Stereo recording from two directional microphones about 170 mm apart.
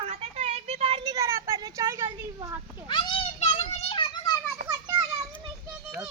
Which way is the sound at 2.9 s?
30° left (ahead or behind).